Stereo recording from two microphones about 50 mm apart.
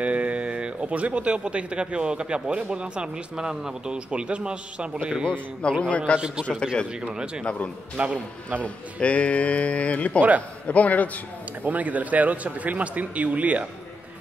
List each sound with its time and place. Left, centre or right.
0.0 s speech: right
5.3 s speech: centre
6.1 s a man's voice: centre
8.0 s speech: right
8.5 s speech: left
11.6 s a man's voice: right